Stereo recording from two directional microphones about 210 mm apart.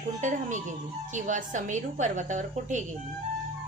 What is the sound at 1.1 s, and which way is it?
A woman's voice, 35° right (ahead or behind).